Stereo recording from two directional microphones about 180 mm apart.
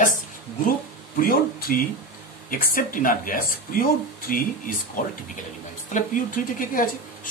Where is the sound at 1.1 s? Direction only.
50° left (ahead or behind).